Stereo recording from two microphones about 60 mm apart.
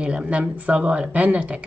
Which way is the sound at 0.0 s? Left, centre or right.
Centre.